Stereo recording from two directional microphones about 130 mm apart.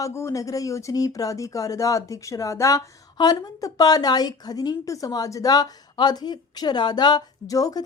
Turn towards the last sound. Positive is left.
turn(degrees=30)  # may be behind; listen again after turning